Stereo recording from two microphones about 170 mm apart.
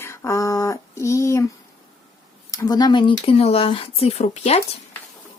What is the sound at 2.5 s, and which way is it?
Speech, 20° left (ahead or behind).